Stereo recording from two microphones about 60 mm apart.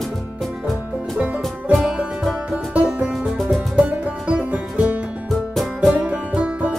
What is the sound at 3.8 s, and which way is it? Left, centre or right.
Music, right.